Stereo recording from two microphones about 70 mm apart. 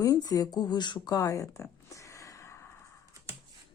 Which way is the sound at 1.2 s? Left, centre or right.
Left.